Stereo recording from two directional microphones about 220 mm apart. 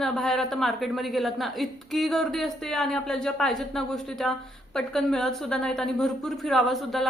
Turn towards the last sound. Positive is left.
turn(degrees=0)  # may be behind; listen again after turning